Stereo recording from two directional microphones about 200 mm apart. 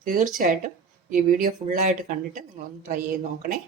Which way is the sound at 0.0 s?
45° right (ahead or behind).